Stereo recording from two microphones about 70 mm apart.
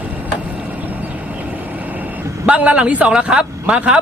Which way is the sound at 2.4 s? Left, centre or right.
Centre.